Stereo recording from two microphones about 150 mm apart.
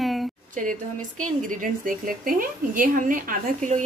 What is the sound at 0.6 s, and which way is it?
A woman's voice, 60° right (ahead or behind).